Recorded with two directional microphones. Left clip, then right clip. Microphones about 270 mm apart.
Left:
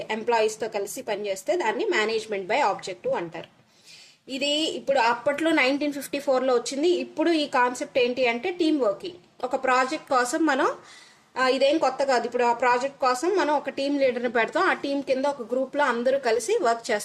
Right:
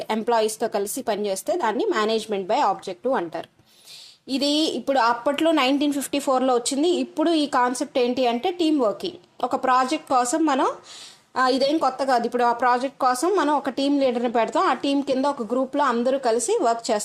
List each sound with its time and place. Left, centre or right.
0.1 s a woman's voice: right
4.6 s a woman's voice: centre